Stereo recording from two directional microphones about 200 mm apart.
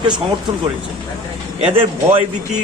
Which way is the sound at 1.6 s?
25° right (ahead or behind).